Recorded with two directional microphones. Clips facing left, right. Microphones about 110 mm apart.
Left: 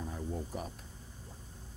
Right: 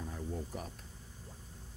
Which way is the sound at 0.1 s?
25° left (ahead or behind).